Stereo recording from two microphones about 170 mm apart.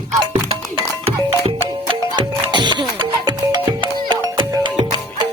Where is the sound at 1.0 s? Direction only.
35° right (ahead or behind).